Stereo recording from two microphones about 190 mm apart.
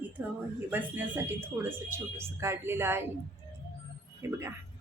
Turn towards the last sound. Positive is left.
turn(degrees=-15)  # may be behind; listen again after turning